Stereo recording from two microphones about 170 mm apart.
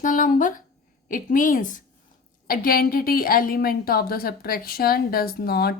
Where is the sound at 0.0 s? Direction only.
50° left (ahead or behind).